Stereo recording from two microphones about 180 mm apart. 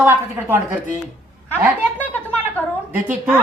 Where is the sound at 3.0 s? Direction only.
10° right (ahead or behind).